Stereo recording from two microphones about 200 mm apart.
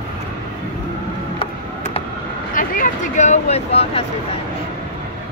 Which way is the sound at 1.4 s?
30° left (ahead or behind).